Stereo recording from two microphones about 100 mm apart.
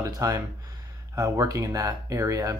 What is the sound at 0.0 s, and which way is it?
Speech, 35° right (ahead or behind).